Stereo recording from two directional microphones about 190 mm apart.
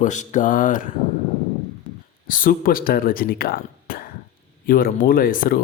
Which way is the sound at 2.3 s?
45° left (ahead or behind).